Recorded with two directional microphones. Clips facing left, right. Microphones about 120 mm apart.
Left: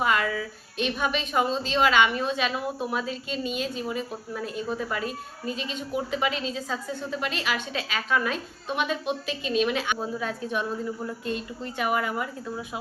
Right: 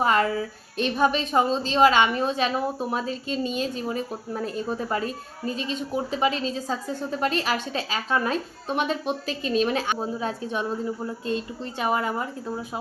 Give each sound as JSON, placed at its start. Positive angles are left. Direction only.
{"t": 0.0, "sound": "a woman's voice", "side_deg": -35}